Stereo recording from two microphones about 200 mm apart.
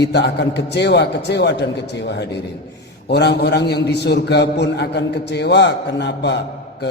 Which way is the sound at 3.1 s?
55° left (ahead or behind).